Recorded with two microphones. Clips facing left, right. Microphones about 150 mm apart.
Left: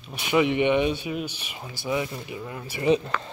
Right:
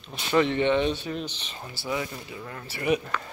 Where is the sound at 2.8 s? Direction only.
25° left (ahead or behind).